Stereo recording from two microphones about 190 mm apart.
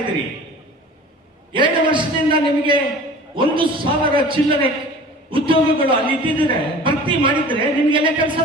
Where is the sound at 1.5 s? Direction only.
25° right (ahead or behind).